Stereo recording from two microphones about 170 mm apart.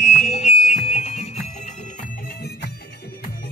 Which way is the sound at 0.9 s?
45° left (ahead or behind).